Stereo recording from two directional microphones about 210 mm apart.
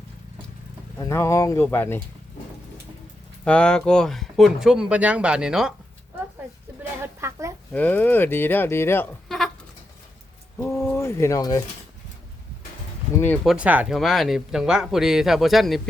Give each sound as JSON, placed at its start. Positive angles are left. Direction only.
{"t": 0.9, "sound": "speech", "side_deg": 15}
{"t": 3.4, "sound": "speech", "side_deg": 5}
{"t": 7.0, "sound": "a sound", "side_deg": -15}
{"t": 7.7, "sound": "speech", "side_deg": 10}
{"t": 10.6, "sound": "speech", "side_deg": 10}
{"t": 13.1, "sound": "speech", "side_deg": 5}